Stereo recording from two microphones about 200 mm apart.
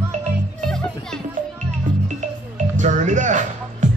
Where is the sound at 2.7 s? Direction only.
40° right (ahead or behind).